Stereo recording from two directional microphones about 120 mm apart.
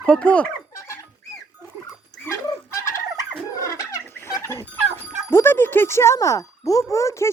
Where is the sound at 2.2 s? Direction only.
25° left (ahead or behind).